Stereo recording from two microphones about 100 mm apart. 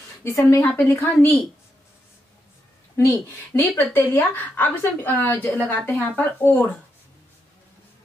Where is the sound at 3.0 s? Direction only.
25° left (ahead or behind).